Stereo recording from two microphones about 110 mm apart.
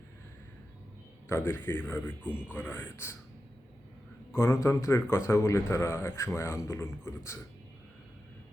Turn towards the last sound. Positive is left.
turn(degrees=25)  # may be behind; listen again after turning